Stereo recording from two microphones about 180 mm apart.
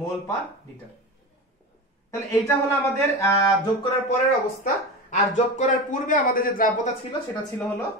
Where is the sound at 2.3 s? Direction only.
15° left (ahead or behind).